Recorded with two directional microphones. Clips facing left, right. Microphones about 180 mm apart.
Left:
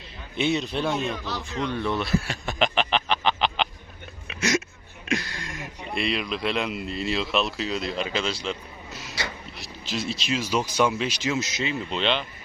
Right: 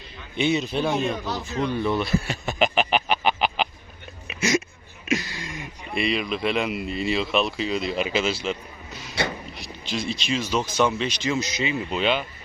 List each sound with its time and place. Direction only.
0.3 s speech: centre (ahead or behind)
1.0 s speech: 40° right (ahead or behind)
1.6 s a sound: 5° right (ahead or behind)
5.0 s speech: 5° right (ahead or behind)